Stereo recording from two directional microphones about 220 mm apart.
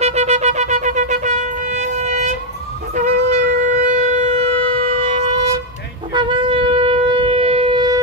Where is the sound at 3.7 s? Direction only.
35° right (ahead or behind).